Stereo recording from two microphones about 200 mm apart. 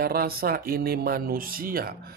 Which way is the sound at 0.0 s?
50° right (ahead or behind).